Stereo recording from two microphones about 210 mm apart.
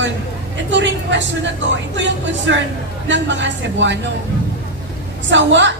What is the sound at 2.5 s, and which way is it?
A woman's voice, 60° right (ahead or behind).